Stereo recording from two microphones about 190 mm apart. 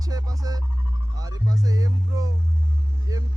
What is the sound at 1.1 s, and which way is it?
Speech, 20° right (ahead or behind).